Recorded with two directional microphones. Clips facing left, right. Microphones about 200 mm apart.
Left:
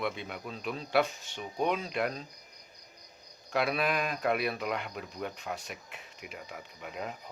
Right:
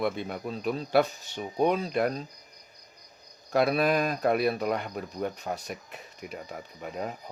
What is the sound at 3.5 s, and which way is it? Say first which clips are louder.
Speech: right 6 dB; 40° right (ahead or behind).